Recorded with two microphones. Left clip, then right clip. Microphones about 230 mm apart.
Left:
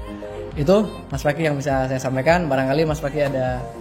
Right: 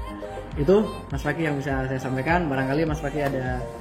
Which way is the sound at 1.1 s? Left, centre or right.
Left.